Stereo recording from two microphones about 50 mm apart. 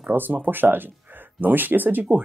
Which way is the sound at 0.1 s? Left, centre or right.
Right.